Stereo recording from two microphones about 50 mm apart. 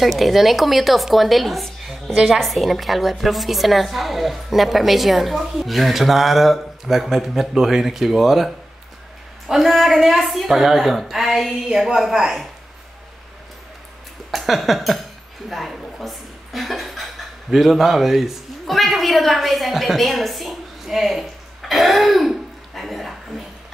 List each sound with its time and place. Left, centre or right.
0.0 s a woman's voice: centre
9.5 s a woman's voice: centre
14.3 s a sound: centre
15.5 s chuckle: centre
17.5 s a woman's voice: centre